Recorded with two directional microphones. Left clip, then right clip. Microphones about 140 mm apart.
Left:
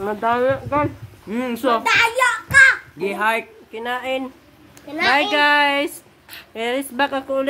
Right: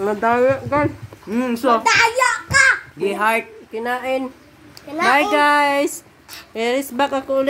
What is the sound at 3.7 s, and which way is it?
Speech, 10° right (ahead or behind).